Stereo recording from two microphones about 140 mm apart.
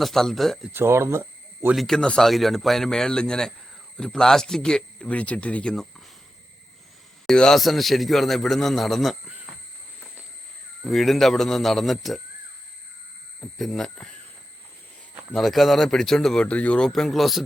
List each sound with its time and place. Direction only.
0.0 s speech: centre (ahead or behind)
0.7 s speech: 15° right (ahead or behind)
1.7 s speech: centre (ahead or behind)
7.3 s speech: 5° left (ahead or behind)
10.8 s speech: centre (ahead or behind)
13.4 s speech: centre (ahead or behind)
15.3 s speech: centre (ahead or behind)